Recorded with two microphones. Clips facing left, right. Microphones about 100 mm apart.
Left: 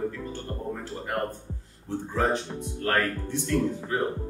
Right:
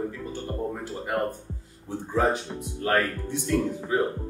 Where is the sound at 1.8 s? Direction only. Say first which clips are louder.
Right 2 dB; 10° right (ahead or behind).